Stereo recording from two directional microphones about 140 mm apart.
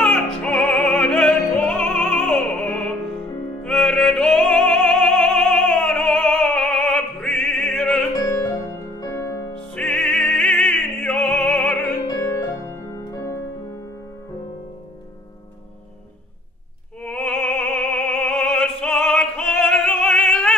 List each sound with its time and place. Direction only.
0.0 s opera: 10° left (ahead or behind)
3.6 s music: 5° left (ahead or behind)
8.1 s music: 25° left (ahead or behind)
9.8 s opera: 10° left (ahead or behind)
12.1 s music: 20° left (ahead or behind)
17.0 s opera: 5° left (ahead or behind)